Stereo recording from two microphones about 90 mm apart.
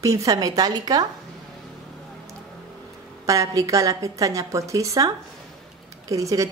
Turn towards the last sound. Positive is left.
turn(degrees=-35)  # may be behind; listen again after turning